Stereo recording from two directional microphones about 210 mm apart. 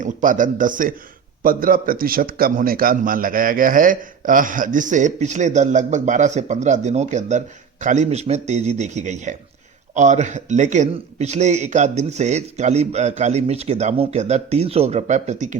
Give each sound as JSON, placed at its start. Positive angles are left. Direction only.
{"t": 0.0, "sound": "a man's voice", "side_deg": -40}